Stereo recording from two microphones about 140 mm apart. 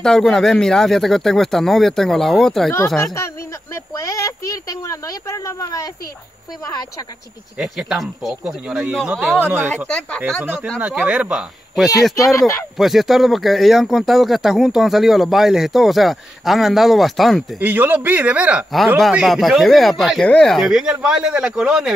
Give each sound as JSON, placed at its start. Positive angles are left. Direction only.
{"t": 0.0, "sound": "speech", "side_deg": 5}
{"t": 3.7, "sound": "speech", "side_deg": 20}
{"t": 7.5, "sound": "speech", "side_deg": -5}
{"t": 10.8, "sound": "speech", "side_deg": -10}
{"t": 12.4, "sound": "speech", "side_deg": 20}
{"t": 12.7, "sound": "speech", "side_deg": 0}
{"t": 17.6, "sound": "speech", "side_deg": -10}